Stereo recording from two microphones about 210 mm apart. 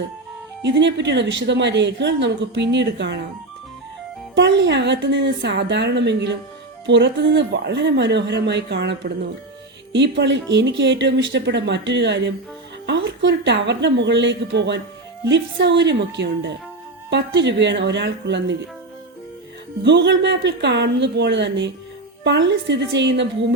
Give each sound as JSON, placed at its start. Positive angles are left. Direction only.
{"t": 0.6, "sound": "speech", "side_deg": -55}
{"t": 4.4, "sound": "speech", "side_deg": -55}
{"t": 19.8, "sound": "speech", "side_deg": -55}